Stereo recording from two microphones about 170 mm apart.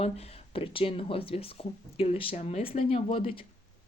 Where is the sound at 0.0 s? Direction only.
35° left (ahead or behind).